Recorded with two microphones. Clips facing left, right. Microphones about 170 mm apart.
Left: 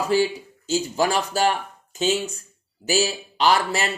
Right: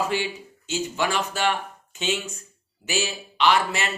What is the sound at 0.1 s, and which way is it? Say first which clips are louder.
A man's voice: left 7 dB; 35° left (ahead or behind).